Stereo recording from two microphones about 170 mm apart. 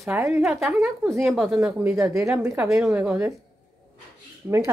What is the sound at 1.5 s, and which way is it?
Speech, 15° right (ahead or behind).